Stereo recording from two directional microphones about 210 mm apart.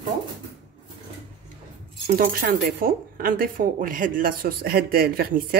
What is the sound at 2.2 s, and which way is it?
Speech, 45° right (ahead or behind).